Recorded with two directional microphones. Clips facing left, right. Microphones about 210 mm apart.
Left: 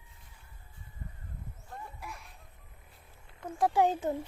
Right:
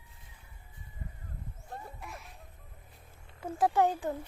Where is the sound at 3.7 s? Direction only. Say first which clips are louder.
Left 1 dB; 20° left (ahead or behind).